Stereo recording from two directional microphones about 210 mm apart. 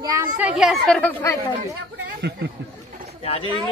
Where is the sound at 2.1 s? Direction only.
50° right (ahead or behind).